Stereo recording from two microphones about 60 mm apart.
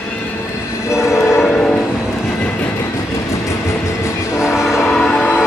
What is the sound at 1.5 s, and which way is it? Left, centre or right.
Music, centre.